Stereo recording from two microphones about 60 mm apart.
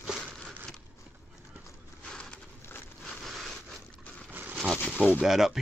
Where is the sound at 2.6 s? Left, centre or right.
Left.